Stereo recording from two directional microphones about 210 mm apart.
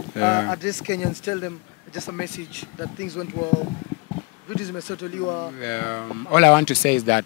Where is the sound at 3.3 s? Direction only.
30° left (ahead or behind).